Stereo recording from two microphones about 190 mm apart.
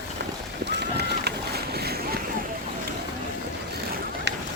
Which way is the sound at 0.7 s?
60° right (ahead or behind).